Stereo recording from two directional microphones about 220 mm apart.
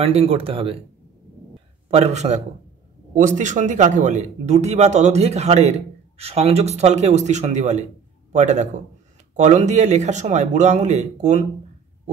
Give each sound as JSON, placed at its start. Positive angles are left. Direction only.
{"t": 0.0, "sound": "speech", "side_deg": -25}
{"t": 1.9, "sound": "speech", "side_deg": -30}